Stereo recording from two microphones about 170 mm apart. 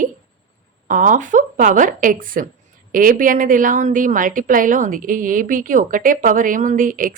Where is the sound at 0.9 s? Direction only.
50° right (ahead or behind).